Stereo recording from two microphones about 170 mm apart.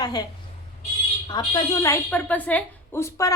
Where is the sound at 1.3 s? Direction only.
25° left (ahead or behind).